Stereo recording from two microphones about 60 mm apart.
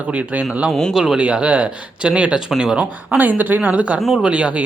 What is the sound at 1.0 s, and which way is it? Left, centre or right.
Speech, centre.